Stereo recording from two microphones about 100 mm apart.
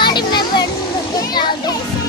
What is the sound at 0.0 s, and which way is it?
Children playing, 50° left (ahead or behind).